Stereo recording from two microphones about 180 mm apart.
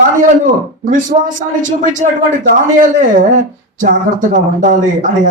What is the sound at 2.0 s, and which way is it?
Speech, 45° right (ahead or behind).